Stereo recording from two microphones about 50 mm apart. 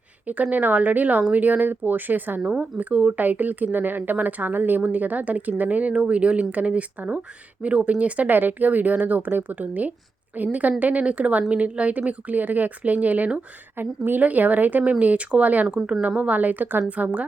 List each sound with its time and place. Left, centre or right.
0.5 s a woman's voice: right
2.4 s speech: right
3.2 s a woman's voice: right
13.7 s a woman's voice: right